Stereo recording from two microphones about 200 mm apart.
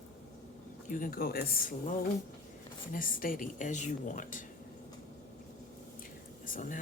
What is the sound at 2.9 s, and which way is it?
Speech, 45° left (ahead or behind).